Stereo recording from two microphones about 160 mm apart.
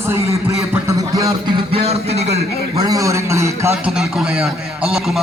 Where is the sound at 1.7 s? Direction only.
40° right (ahead or behind).